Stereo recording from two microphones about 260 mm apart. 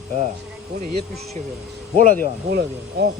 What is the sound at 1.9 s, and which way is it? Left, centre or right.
Speech, right.